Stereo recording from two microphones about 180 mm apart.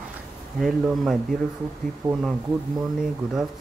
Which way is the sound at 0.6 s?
Centre (ahead or behind).